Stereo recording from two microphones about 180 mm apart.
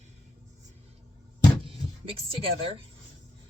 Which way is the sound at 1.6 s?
30° right (ahead or behind).